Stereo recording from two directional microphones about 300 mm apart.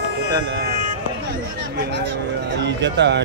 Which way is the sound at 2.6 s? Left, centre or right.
Right.